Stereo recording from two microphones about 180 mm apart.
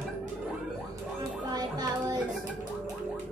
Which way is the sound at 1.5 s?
20° right (ahead or behind).